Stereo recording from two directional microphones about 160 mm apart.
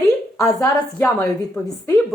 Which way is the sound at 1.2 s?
15° left (ahead or behind).